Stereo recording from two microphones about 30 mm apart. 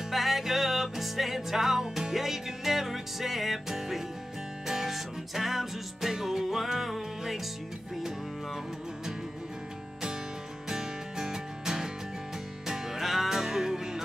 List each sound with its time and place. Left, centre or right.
0.1 s music: centre
10.7 s music: centre